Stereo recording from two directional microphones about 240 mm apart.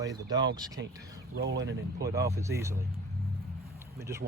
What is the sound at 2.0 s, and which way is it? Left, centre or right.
Speech, centre.